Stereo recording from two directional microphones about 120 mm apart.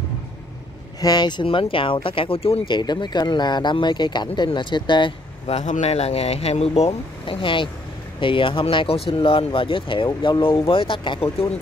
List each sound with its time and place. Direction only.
1.0 s speech: 35° left (ahead or behind); by 2.8 s 55° left (ahead or behind)
2.8 s speech: 35° left (ahead or behind)
5.5 s speech: 70° left (ahead or behind); by 11.2 s 45° left (ahead or behind)